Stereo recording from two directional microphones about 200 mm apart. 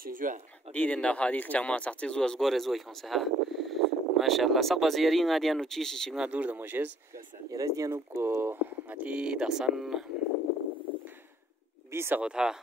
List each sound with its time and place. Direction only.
0.0 s speech: 45° right (ahead or behind)
0.7 s speech: 5° left (ahead or behind)
11.9 s speech: 10° right (ahead or behind)